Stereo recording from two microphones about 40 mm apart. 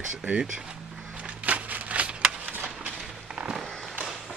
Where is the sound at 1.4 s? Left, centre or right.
Right.